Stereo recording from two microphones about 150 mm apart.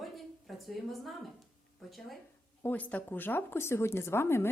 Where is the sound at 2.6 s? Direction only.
10° left (ahead or behind).